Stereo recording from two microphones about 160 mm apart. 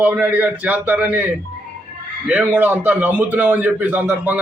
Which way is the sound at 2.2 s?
10° right (ahead or behind).